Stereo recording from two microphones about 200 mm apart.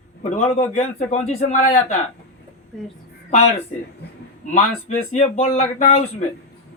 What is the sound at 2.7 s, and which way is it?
Speech, centre (ahead or behind).